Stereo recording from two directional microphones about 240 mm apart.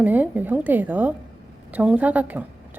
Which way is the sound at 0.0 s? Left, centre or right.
Centre.